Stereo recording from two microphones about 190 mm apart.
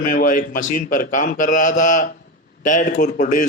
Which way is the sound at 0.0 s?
45° left (ahead or behind).